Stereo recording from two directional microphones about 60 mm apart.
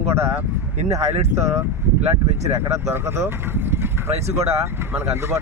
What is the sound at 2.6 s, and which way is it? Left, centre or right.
Speech, right.